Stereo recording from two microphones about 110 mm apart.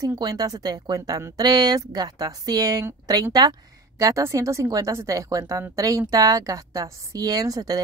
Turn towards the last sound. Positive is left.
turn(degrees=-35)  # may be behind; listen again after turning